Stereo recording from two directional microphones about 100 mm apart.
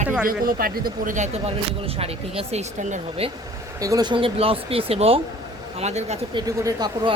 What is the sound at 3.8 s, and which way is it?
Speech, 35° right (ahead or behind).